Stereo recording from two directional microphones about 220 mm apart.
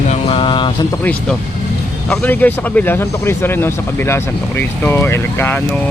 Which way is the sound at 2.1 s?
10° left (ahead or behind).